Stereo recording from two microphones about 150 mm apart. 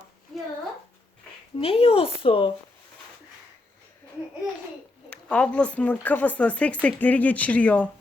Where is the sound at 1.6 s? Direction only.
40° left (ahead or behind).